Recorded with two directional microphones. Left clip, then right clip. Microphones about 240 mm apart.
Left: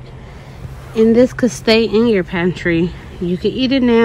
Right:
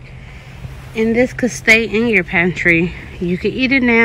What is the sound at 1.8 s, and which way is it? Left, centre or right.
Speech, centre.